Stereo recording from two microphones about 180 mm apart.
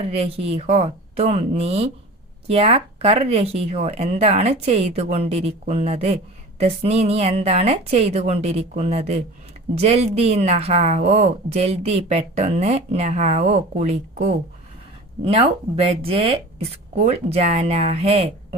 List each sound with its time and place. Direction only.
0.0 s a woman's voice: 35° right (ahead or behind)
15.2 s a woman's voice: 30° right (ahead or behind)